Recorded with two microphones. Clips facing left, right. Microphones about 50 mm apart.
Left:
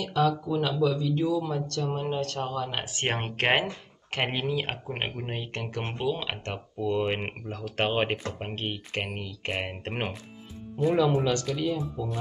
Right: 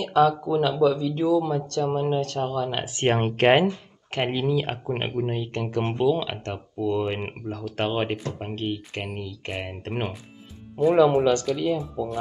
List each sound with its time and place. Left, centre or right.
0.0 s speech: centre
2.5 s speech: centre
3.1 s speech: centre
4.1 s speech: left
11.1 s speech: centre